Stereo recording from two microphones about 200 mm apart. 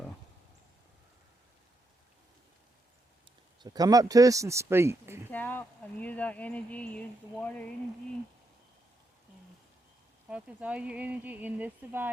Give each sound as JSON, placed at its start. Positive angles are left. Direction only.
{"t": 3.6, "sound": "speech", "side_deg": -20}
{"t": 5.3, "sound": "speech", "side_deg": 10}
{"t": 10.2, "sound": "speech", "side_deg": -5}